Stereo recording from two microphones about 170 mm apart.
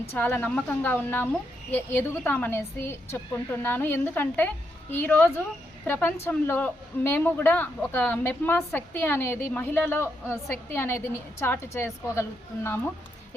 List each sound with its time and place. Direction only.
0.1 s a woman's voice: 10° left (ahead or behind)